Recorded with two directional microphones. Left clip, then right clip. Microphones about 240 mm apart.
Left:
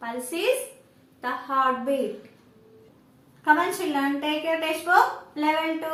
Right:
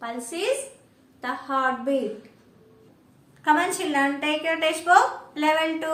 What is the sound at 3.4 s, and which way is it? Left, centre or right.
A woman's voice, centre.